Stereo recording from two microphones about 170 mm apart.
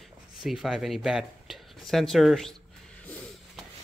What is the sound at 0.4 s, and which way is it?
Speech, centre (ahead or behind).